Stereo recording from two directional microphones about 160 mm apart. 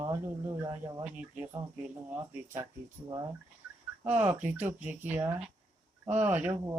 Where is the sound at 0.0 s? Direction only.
15° right (ahead or behind).